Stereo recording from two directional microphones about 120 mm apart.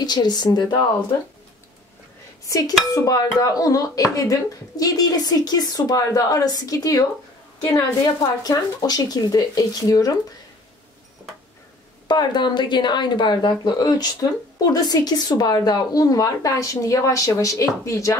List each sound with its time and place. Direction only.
0.0 s speech: 35° left (ahead or behind)
2.4 s speech: 30° left (ahead or behind)
8.2 s speech: 30° left (ahead or behind)
12.1 s speech: 40° left (ahead or behind)